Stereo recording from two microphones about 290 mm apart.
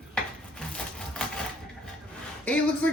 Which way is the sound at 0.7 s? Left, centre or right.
Centre.